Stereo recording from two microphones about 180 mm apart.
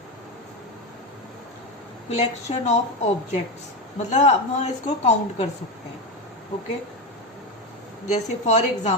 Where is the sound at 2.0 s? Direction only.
35° left (ahead or behind).